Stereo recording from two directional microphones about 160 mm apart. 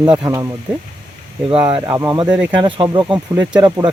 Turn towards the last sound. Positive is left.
turn(degrees=-25)  # may be behind; listen again after turning